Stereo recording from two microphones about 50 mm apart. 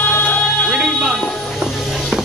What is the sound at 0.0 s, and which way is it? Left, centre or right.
Music, left.